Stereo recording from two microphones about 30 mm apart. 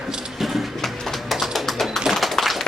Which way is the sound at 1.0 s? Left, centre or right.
Centre.